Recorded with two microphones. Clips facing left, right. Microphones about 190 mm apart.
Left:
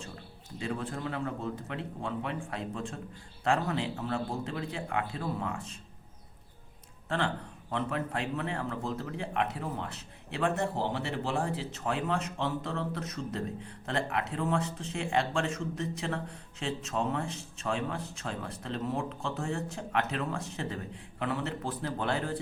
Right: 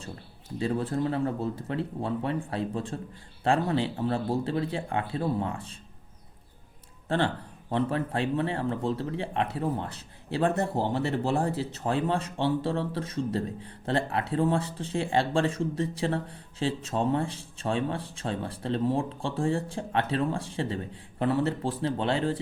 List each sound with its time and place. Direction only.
0.6 s speech: 35° right (ahead or behind)
7.7 s speech: 35° right (ahead or behind)